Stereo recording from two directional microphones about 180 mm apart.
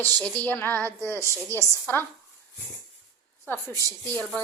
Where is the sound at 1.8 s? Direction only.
10° left (ahead or behind).